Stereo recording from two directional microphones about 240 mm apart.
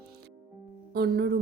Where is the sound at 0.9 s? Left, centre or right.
Right.